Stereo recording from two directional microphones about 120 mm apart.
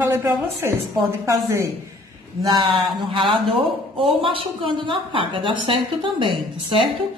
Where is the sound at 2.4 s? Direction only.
40° right (ahead or behind).